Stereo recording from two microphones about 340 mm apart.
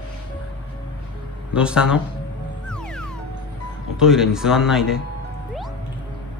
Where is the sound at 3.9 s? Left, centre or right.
Centre.